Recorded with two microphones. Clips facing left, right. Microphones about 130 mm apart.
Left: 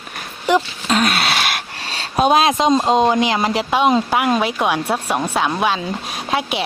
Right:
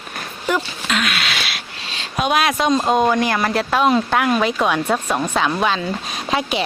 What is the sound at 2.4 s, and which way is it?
Speech, 25° left (ahead or behind).